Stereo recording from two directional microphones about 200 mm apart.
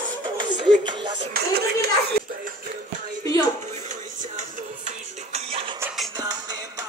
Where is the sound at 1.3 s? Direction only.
50° right (ahead or behind).